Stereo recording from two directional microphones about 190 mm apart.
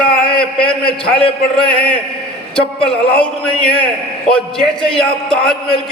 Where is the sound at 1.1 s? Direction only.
30° left (ahead or behind).